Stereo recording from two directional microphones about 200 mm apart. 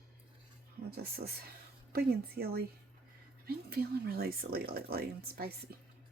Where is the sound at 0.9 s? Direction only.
50° right (ahead or behind).